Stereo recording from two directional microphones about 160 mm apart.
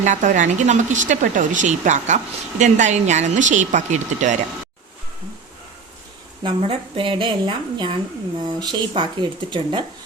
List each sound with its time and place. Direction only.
0.0 s a woman's voice: 50° right (ahead or behind)
6.4 s speech: 35° right (ahead or behind)